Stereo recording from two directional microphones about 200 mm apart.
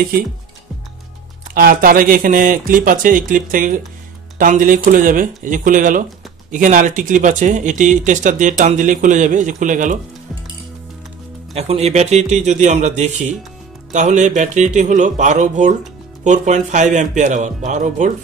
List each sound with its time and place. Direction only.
1.5 s speech: 45° right (ahead or behind)
11.5 s speech: 30° right (ahead or behind)